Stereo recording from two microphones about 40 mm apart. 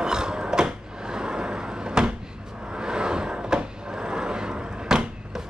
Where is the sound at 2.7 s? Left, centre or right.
Right.